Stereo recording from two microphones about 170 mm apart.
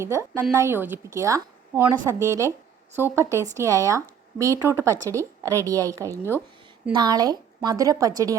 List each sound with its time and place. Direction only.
0.0 s a woman's voice: 15° right (ahead or behind)